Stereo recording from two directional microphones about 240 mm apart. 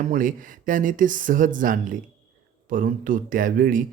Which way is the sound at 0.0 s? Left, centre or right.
Right.